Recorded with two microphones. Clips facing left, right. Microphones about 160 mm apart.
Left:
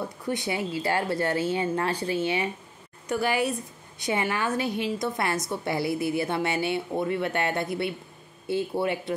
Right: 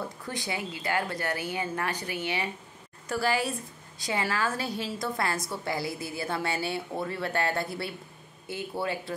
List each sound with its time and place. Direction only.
0.2 s a woman's voice: 20° left (ahead or behind)